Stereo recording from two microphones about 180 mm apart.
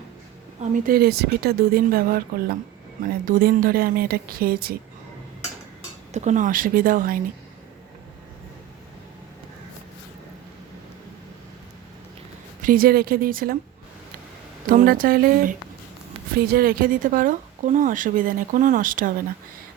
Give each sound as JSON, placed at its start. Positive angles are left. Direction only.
{"t": 0.6, "sound": "speech", "side_deg": -50}
{"t": 6.1, "sound": "a woman's voice", "side_deg": -40}
{"t": 12.6, "sound": "speech", "side_deg": -55}
{"t": 14.7, "sound": "a woman's voice", "side_deg": -50}